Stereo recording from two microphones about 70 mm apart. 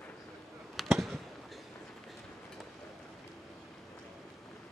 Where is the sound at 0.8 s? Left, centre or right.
Centre.